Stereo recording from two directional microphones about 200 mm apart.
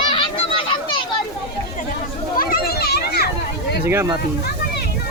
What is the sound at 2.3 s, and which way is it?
Children playing, 50° left (ahead or behind).